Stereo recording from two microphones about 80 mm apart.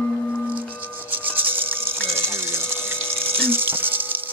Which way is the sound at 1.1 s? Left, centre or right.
Right.